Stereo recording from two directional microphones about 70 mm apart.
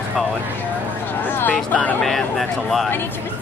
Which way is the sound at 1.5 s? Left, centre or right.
Left.